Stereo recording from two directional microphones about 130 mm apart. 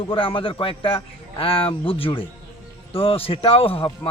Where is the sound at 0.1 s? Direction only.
40° left (ahead or behind).